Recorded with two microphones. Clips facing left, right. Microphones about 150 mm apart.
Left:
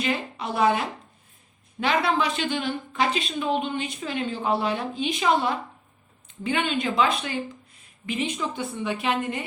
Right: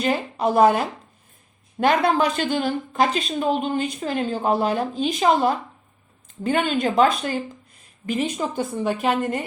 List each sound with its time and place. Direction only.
0.0 s speech: 45° right (ahead or behind)